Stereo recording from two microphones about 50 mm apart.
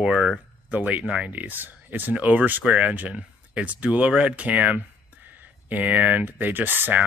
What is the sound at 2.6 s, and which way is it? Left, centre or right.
A man's voice, right.